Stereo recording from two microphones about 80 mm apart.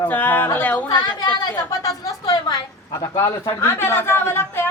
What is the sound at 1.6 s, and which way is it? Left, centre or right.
A woman's voice, left.